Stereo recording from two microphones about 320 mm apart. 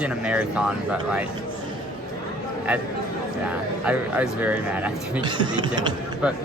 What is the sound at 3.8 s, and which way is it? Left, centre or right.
Speech, centre.